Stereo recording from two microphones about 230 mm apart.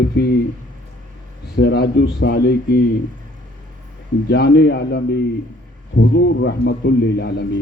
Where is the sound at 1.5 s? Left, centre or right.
Left.